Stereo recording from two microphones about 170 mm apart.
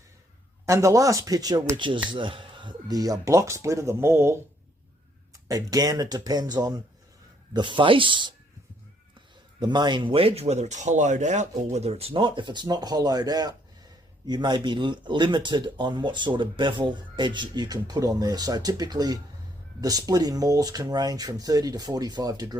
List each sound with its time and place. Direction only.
0.6 s speech: 20° right (ahead or behind)
9.6 s speech: 25° right (ahead or behind)